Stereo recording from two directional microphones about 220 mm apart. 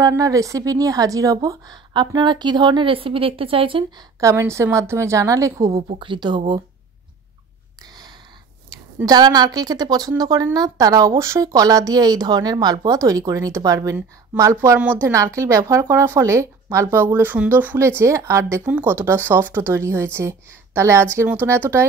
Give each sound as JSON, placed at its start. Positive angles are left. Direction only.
{"t": 0.0, "sound": "a woman's voice", "side_deg": -15}
{"t": 5.8, "sound": "speech", "side_deg": -25}
{"t": 8.6, "sound": "a woman's voice", "side_deg": -20}